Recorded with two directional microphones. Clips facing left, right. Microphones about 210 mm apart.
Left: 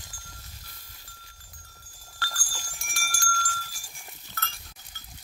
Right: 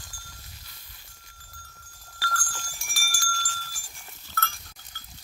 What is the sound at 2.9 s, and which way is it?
Goat, 5° right (ahead or behind).